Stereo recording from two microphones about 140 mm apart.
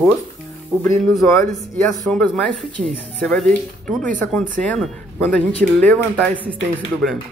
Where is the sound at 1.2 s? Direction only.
25° left (ahead or behind).